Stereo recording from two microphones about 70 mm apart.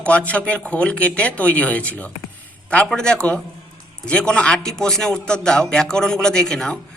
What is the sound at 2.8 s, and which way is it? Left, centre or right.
A man's voice, centre.